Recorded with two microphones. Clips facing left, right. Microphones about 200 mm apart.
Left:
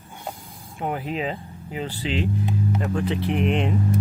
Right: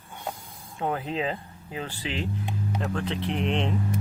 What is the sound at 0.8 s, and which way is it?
Speech, 10° left (ahead or behind).